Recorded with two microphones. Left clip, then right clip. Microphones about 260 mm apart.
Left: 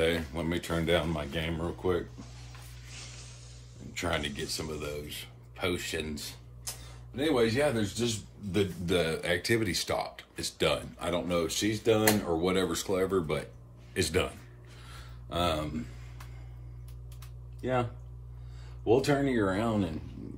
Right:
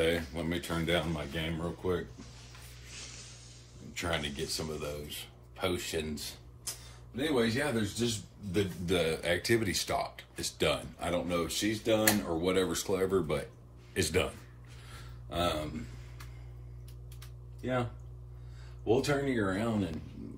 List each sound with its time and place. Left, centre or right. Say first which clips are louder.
0.0 s speech: left 1 dB; centre
4.0 s speech: left 2 dB; centre
7.6 s speech: left 4 dB; centre
18.9 s speech: left 3 dB; centre